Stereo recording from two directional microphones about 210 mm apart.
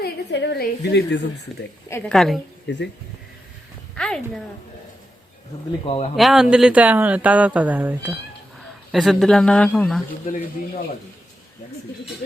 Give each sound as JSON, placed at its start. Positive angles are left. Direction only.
{"t": 0.0, "sound": "a woman's voice", "side_deg": 55}
{"t": 1.9, "sound": "speech", "side_deg": 5}
{"t": 2.6, "sound": "speech", "side_deg": 55}
{"t": 3.9, "sound": "speech", "side_deg": 5}
{"t": 5.8, "sound": "speech", "side_deg": 25}
{"t": 6.1, "sound": "speech", "side_deg": 0}